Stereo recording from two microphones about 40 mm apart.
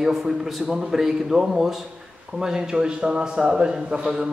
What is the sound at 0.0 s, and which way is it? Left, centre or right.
A man's voice, centre.